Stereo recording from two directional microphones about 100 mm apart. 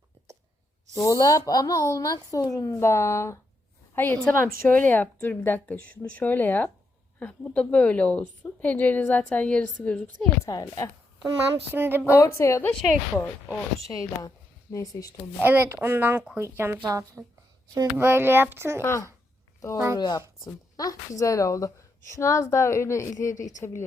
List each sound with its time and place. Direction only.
0.9 s a woman's voice: 35° left (ahead or behind); by 10.2 s 10° left (ahead or behind)
10.4 s speech: 35° left (ahead or behind)
11.7 s speech: 20° right (ahead or behind)
12.2 s a woman's voice: 30° left (ahead or behind)
12.7 s a woman's voice: 10° left (ahead or behind)
13.8 s a woman's voice: 35° left (ahead or behind)
15.4 s a woman's voice: 20° right (ahead or behind)
18.8 s a woman's voice: 30° left (ahead or behind)
19.7 s speech: 25° right (ahead or behind)
20.0 s a woman's voice: 45° left (ahead or behind); by 23.8 s 30° left (ahead or behind)